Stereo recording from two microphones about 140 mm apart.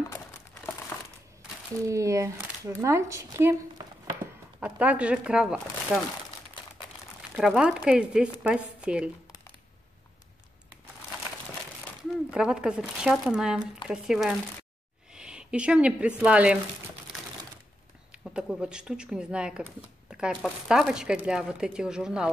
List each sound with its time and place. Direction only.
1.9 s speech: 20° right (ahead or behind)
4.6 s speech: 10° right (ahead or behind)
7.3 s speech: 5° right (ahead or behind)
12.0 s speech: 5° right (ahead or behind)
15.1 s a sound: 5° right (ahead or behind)
16.2 s speech: 10° right (ahead or behind)
18.1 s speech: 5° right (ahead or behind)
20.1 s a sound: 5° right (ahead or behind)
20.6 s speech: 5° right (ahead or behind)